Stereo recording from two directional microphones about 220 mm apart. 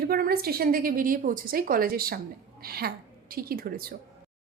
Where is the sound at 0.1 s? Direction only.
45° right (ahead or behind).